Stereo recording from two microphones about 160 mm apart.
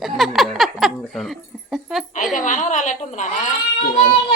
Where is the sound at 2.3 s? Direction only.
50° left (ahead or behind).